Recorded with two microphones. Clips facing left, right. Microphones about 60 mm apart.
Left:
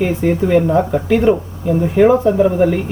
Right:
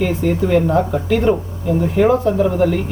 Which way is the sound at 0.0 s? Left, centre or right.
Centre.